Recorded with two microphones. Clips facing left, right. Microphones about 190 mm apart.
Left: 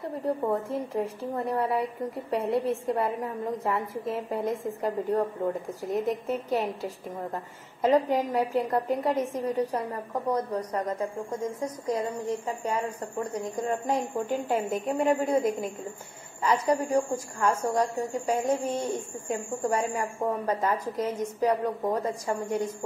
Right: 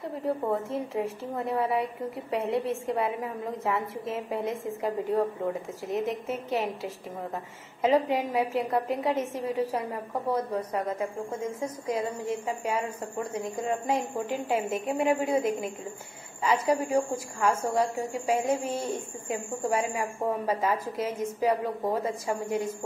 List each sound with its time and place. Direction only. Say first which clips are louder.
0.5 s a woman's voice: left 1 dB; centre (ahead or behind)
13.8 s a woman's voice: left 1 dB; centre (ahead or behind)
16.4 s a woman's voice: even; 10° right (ahead or behind)